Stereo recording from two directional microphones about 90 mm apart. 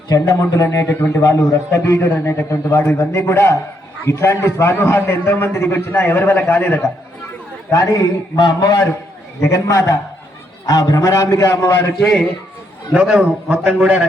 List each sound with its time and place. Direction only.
0.1 s a man's voice: 40° left (ahead or behind)
1.2 s a man's voice: 40° left (ahead or behind); by 6.8 s 20° left (ahead or behind)
7.7 s a man's voice: 35° left (ahead or behind)
11.9 s a man's voice: 5° left (ahead or behind)
13.2 s a man's voice: 20° right (ahead or behind)